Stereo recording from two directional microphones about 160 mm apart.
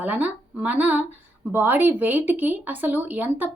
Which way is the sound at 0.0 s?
10° right (ahead or behind).